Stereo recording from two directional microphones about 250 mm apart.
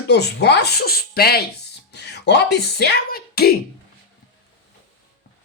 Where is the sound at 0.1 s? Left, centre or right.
Left.